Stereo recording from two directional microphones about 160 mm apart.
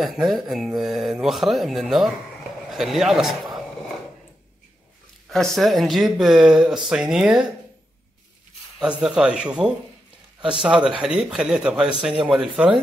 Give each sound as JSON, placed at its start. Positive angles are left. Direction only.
{"t": 0.0, "sound": "a man's voice", "side_deg": 0}
{"t": 5.3, "sound": "a man's voice", "side_deg": 0}
{"t": 9.0, "sound": "a man's voice", "side_deg": -5}